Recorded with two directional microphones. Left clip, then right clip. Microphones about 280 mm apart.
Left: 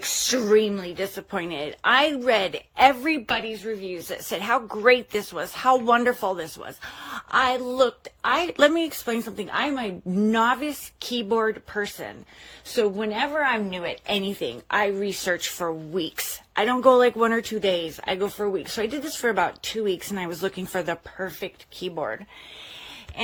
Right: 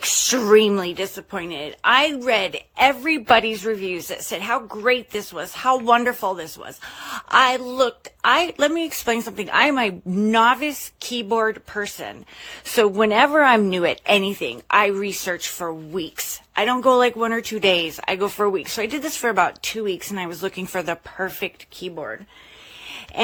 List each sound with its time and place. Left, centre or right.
0.1 s a woman's voice: centre
3.2 s a woman's voice: centre